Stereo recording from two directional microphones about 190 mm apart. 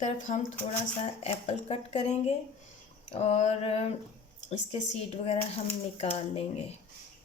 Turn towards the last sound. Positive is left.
turn(degrees=30)  # may be behind; listen again after turning